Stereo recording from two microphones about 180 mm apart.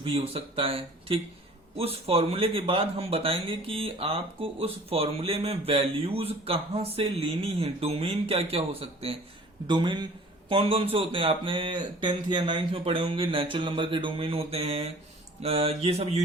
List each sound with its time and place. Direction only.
0.0 s speech: 35° right (ahead or behind)